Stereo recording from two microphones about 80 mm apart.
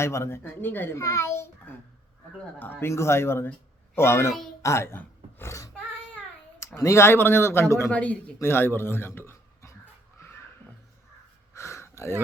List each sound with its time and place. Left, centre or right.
0.0 s speech: left
0.9 s speech: left
2.6 s speech: left
5.5 s a sound: left
6.6 s speech: left
7.9 s a man's voice: centre
8.4 s a man's voice: left
11.5 s gasp: left